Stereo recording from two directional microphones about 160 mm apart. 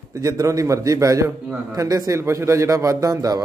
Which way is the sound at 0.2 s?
20° right (ahead or behind).